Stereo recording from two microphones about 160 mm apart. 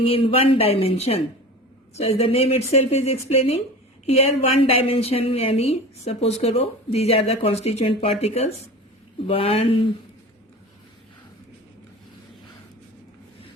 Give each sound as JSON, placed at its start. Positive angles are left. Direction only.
{"t": 0.0, "sound": "speech", "side_deg": 35}